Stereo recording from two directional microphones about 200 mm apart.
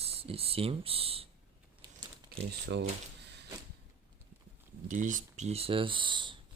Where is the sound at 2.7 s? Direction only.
60° right (ahead or behind).